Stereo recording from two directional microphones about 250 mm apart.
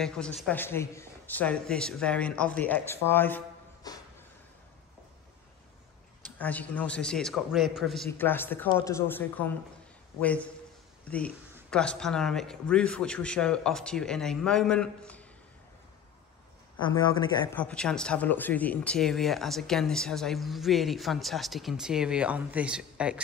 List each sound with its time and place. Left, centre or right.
0.0 s speech: centre
6.3 s speech: centre
16.8 s a man's voice: centre
17.6 s speech: centre